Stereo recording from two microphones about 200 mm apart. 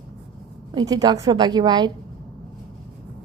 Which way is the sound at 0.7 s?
20° right (ahead or behind).